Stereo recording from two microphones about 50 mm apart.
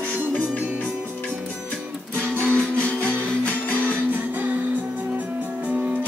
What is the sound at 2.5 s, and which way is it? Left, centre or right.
Music, left.